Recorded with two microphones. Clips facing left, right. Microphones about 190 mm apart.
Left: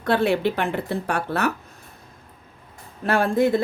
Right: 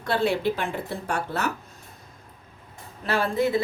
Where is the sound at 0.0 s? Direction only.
55° left (ahead or behind).